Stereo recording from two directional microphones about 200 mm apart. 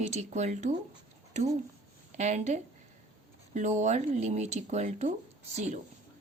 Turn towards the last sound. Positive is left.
turn(degrees=-35)  # may be behind; listen again after turning